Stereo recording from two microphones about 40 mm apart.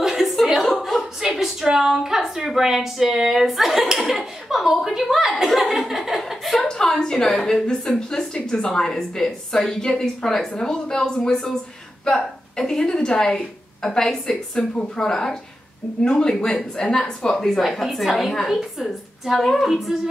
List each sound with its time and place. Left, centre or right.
0.0 s a sound: centre
1.2 s a woman's voice: centre
6.6 s a woman's voice: centre
14.6 s a woman's voice: left
17.6 s a woman's voice: centre
19.3 s a woman's voice: centre
19.7 s a woman's voice: centre